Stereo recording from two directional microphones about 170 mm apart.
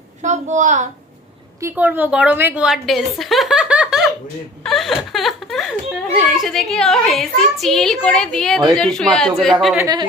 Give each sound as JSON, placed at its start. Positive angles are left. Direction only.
{"t": 0.2, "sound": "a woman's voice", "side_deg": -45}
{"t": 1.6, "sound": "a woman's voice", "side_deg": -10}
{"t": 4.6, "sound": "a sound", "side_deg": 0}
{"t": 6.3, "sound": "a woman's voice", "side_deg": 0}
{"t": 9.7, "sound": "speech", "side_deg": -20}